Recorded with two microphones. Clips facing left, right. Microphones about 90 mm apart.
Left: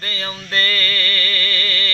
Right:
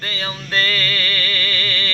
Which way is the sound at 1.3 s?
20° right (ahead or behind).